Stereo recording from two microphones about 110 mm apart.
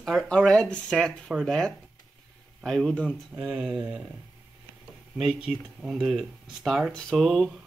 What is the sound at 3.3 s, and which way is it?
Speech, 10° right (ahead or behind).